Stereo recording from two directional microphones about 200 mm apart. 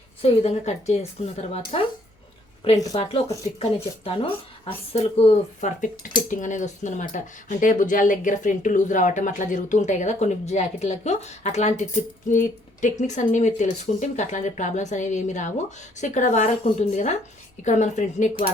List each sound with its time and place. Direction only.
0.2 s speech: 30° left (ahead or behind)
2.9 s speech: 30° left (ahead or behind)